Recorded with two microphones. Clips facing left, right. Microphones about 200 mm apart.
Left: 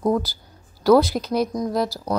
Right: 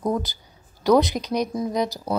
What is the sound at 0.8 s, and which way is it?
A woman's voice, 15° right (ahead or behind).